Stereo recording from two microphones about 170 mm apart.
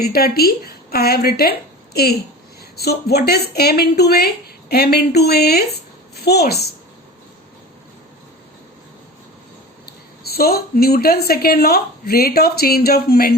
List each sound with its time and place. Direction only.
0.0 s a woman's voice: 65° left (ahead or behind)
10.2 s a woman's voice: 65° left (ahead or behind)